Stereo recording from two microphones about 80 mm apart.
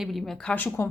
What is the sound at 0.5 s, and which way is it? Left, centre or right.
Speech, left.